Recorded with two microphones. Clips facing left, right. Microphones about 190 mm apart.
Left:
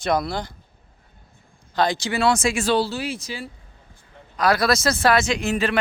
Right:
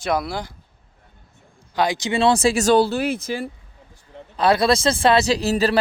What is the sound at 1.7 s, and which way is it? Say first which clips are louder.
Speech: right 1 dB; 15° right (ahead or behind).